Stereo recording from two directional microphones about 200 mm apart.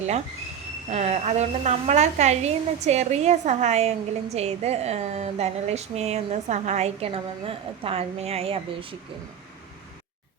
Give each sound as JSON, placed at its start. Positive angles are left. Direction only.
{"t": 0.9, "sound": "a woman's voice", "side_deg": -35}